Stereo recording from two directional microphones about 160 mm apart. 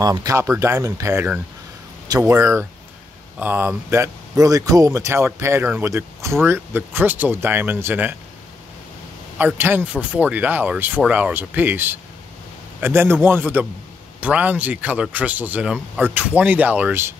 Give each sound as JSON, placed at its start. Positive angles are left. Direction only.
{"t": 0.0, "sound": "speech", "side_deg": -25}
{"t": 2.0, "sound": "speech", "side_deg": -20}
{"t": 9.4, "sound": "speech", "side_deg": -10}